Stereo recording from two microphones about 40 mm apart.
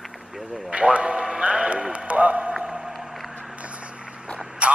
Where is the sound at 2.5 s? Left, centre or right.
Centre.